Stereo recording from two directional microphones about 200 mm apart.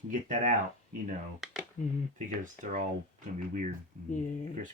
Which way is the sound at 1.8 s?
40° left (ahead or behind).